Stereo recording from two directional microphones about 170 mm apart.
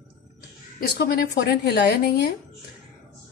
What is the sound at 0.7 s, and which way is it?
A woman's voice, 70° left (ahead or behind).